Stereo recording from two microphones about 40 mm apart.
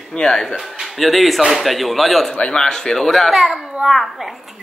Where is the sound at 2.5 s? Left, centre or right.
Centre.